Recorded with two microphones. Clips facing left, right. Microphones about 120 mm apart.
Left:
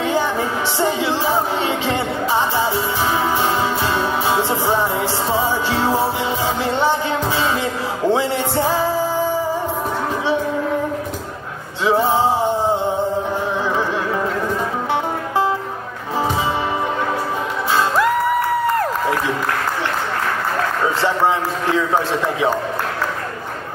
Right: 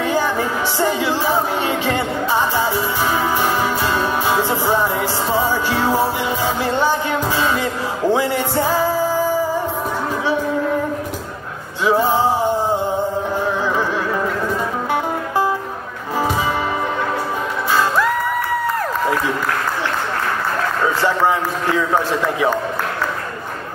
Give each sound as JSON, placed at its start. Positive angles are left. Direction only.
{"t": 0.0, "sound": "music", "side_deg": 25}
{"t": 3.8, "sound": "music", "side_deg": 25}
{"t": 11.8, "sound": "music", "side_deg": 25}